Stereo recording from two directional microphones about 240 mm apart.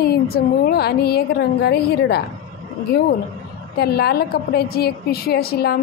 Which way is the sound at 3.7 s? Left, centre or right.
Left.